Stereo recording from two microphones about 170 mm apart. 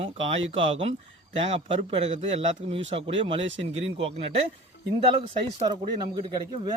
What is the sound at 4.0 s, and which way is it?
Speech, 35° right (ahead or behind).